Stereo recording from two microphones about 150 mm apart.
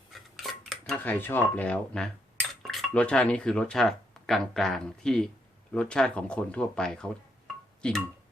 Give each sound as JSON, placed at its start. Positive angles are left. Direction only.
{"t": 0.1, "sound": "cutlery", "side_deg": 0}
{"t": 2.6, "sound": "speech", "side_deg": 5}
{"t": 7.8, "sound": "music", "side_deg": 5}